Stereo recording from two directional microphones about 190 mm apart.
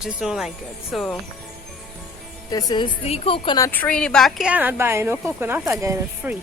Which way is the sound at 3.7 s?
5° left (ahead or behind).